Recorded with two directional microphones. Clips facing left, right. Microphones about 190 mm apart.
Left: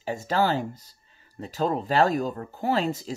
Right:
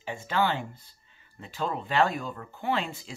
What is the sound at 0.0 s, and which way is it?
Speech, 40° left (ahead or behind).